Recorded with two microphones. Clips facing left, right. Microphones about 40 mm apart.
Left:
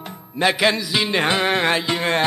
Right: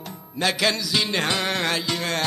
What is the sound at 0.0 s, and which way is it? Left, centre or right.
Music, left.